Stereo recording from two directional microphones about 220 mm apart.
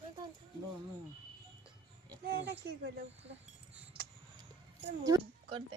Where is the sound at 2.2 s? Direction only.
45° right (ahead or behind).